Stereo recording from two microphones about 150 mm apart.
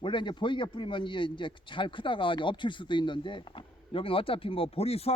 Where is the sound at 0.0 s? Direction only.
30° left (ahead or behind).